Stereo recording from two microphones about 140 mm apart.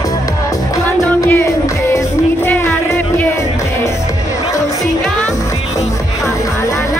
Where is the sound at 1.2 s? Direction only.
20° left (ahead or behind).